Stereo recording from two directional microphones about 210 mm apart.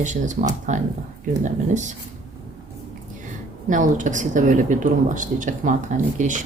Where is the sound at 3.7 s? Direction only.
40° right (ahead or behind).